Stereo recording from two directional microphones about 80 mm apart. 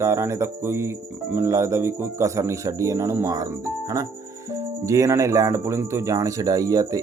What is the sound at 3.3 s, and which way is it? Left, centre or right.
Speech, right.